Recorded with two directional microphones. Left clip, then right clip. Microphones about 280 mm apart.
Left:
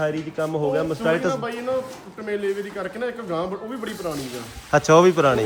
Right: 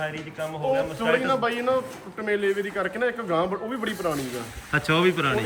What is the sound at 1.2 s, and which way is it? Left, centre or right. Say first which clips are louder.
Speech: right 1 dB; centre.